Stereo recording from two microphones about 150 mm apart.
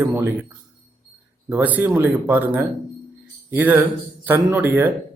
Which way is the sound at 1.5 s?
10° right (ahead or behind).